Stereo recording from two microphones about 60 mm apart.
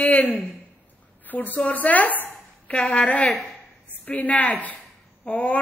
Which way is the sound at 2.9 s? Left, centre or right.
Left.